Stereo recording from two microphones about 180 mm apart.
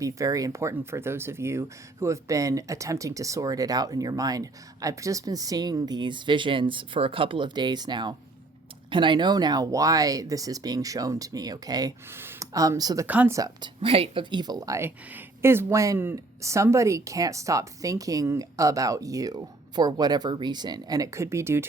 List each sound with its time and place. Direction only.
0.0 s speech: 20° right (ahead or behind)
13.1 s speech: 10° right (ahead or behind)